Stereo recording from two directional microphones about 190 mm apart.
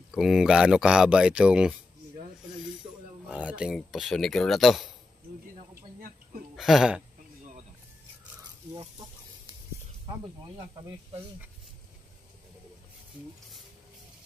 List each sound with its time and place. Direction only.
0.1 s speech: centre (ahead or behind)
3.3 s speech: 5° right (ahead or behind)
5.6 s a sound: 45° right (ahead or behind)
6.5 s speech: centre (ahead or behind)